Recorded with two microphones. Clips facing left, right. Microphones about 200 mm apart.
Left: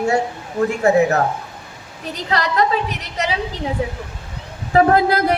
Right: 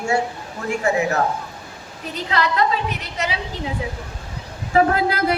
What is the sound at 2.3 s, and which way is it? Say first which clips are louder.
Speech: left 2 dB; 40° left (ahead or behind).